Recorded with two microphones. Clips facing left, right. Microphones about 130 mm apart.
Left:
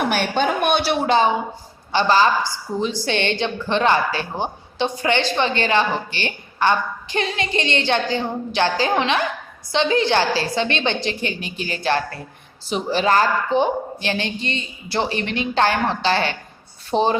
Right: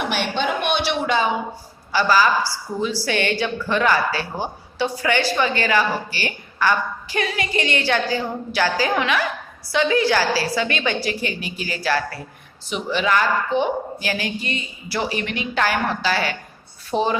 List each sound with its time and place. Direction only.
0.0 s a man's voice: 45° left (ahead or behind)
0.9 s a woman's voice: 30° left (ahead or behind)